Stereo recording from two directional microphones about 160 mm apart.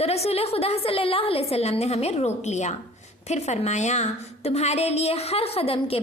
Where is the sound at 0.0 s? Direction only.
40° left (ahead or behind).